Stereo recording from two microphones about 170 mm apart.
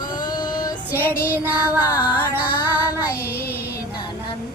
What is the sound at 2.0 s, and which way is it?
Music, 10° right (ahead or behind).